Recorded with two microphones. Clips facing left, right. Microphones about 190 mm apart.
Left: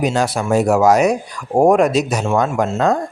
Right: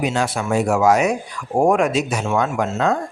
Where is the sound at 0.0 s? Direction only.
40° left (ahead or behind).